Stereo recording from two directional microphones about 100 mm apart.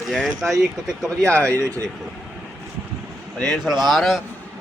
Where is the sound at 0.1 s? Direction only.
5° left (ahead or behind).